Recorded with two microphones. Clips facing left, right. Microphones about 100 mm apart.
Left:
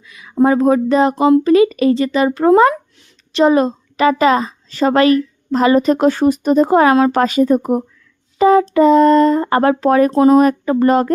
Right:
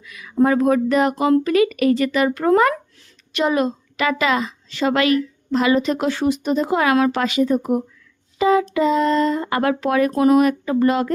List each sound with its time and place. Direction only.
0.0 s speech: 25° left (ahead or behind); by 11.1 s 45° left (ahead or behind)